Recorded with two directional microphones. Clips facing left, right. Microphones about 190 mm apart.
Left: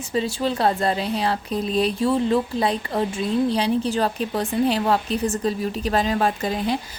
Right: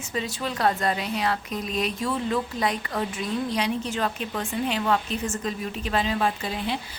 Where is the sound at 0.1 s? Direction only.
30° left (ahead or behind).